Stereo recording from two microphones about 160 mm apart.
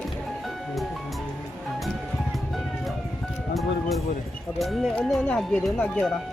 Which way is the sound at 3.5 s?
Centre (ahead or behind).